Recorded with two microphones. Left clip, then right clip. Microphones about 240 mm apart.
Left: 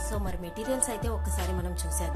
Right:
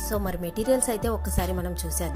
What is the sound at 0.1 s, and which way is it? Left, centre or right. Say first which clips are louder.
A woman's voice: right 7 dB; right.